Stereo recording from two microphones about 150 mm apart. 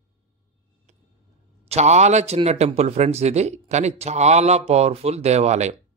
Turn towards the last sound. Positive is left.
turn(degrees=-50)  # may be behind; listen again after turning